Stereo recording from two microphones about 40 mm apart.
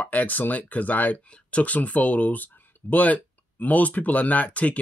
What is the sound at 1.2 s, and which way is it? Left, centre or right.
Speech, left.